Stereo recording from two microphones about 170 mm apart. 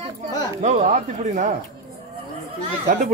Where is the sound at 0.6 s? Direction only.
45° right (ahead or behind).